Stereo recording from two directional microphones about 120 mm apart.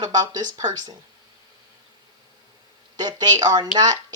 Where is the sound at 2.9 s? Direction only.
35° right (ahead or behind).